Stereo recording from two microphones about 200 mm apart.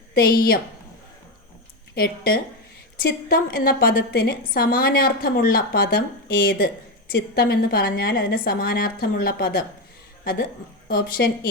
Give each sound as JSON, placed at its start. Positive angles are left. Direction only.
{"t": 0.1, "sound": "a woman's voice", "side_deg": 50}
{"t": 2.0, "sound": "a woman's voice", "side_deg": 45}
{"t": 10.8, "sound": "speech", "side_deg": 50}